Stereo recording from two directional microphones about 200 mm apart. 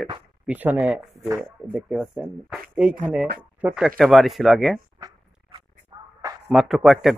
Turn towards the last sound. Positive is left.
turn(degrees=0)  # may be behind; listen again after turning